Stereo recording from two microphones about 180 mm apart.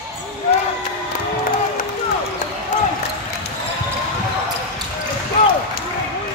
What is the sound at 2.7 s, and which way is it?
Basketball bounce, 40° left (ahead or behind).